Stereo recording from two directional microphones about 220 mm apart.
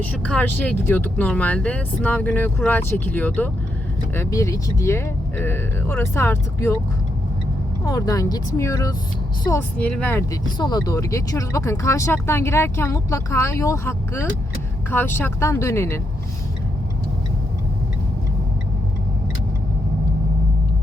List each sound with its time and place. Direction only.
0.0 s speech: 5° left (ahead or behind)
7.9 s speech: 15° left (ahead or behind)